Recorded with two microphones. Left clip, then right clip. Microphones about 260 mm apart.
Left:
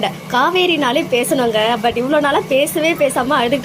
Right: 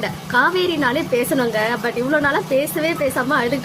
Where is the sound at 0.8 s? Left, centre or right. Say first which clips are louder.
Left 3 dB; centre.